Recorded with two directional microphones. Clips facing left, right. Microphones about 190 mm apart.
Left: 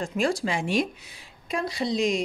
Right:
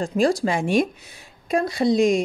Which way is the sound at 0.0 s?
35° right (ahead or behind).